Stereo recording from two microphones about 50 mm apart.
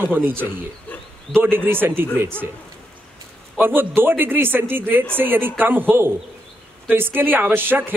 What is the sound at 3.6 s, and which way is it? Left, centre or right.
A man's voice, right.